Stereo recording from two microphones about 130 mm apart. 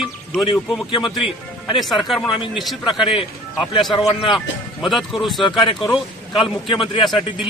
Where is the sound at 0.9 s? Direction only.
40° left (ahead or behind).